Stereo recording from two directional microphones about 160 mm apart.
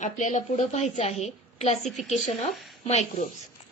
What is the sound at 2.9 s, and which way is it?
Speech, 45° left (ahead or behind).